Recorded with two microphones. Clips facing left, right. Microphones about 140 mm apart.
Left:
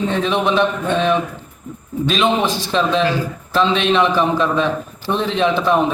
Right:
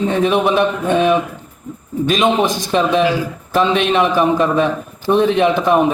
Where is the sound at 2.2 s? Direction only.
15° right (ahead or behind).